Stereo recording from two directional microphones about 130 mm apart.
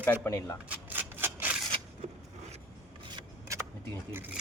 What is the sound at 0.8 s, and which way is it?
Rub, 15° right (ahead or behind).